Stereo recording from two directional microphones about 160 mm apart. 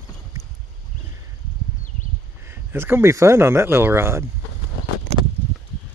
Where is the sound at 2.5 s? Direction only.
15° right (ahead or behind).